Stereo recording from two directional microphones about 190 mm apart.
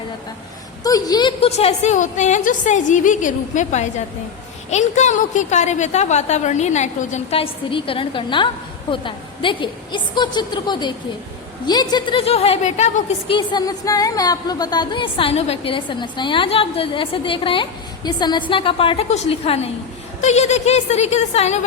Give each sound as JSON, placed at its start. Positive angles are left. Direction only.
{"t": 0.9, "sound": "a woman's voice", "side_deg": 20}